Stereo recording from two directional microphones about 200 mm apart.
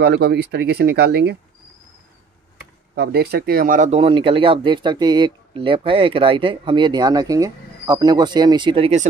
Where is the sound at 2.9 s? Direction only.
55° right (ahead or behind).